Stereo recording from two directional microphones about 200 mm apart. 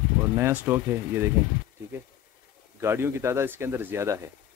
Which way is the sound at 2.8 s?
10° right (ahead or behind).